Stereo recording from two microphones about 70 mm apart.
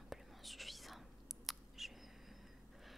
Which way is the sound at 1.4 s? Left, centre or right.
Centre.